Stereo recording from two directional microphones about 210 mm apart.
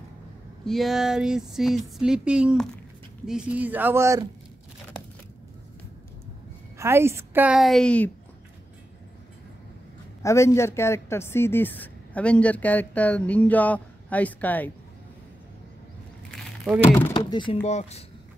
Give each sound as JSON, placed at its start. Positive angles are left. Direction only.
{"t": 0.7, "sound": "a sound", "side_deg": 0}
{"t": 3.3, "sound": "a woman's voice", "side_deg": -5}
{"t": 6.8, "sound": "a woman's voice", "side_deg": -10}
{"t": 10.2, "sound": "speech", "side_deg": 15}
{"t": 16.3, "sound": "a sound", "side_deg": 0}
{"t": 16.8, "sound": "speech", "side_deg": 10}
{"t": 17.1, "sound": "speech", "side_deg": 25}